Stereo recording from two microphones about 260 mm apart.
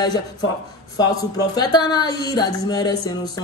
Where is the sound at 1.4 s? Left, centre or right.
Centre.